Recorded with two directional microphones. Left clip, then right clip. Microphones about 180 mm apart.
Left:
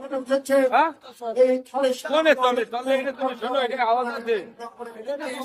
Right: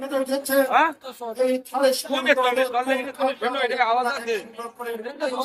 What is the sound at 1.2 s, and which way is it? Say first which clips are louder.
Speech: left 2 dB; 10° right (ahead or behind).